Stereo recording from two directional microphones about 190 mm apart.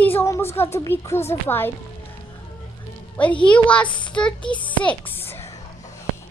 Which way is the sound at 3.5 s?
5° left (ahead or behind).